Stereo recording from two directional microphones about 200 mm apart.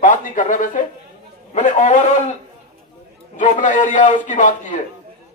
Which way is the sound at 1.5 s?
35° left (ahead or behind).